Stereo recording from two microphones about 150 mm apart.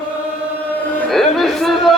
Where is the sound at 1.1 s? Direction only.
Centre (ahead or behind).